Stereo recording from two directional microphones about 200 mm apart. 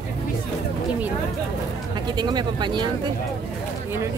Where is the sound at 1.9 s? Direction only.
20° right (ahead or behind).